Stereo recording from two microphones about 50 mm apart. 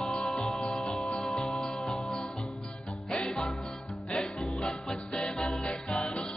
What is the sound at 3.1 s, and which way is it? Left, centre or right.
Music, centre.